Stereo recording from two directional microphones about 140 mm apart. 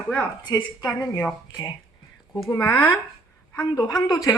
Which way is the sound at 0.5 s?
25° left (ahead or behind).